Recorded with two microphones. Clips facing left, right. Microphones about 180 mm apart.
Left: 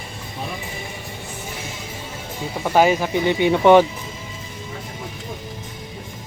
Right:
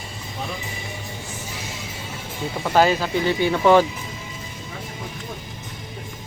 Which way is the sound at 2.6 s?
10° left (ahead or behind).